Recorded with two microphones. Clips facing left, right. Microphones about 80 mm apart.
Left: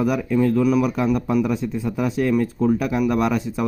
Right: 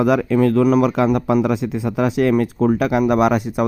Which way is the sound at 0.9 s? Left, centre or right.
Right.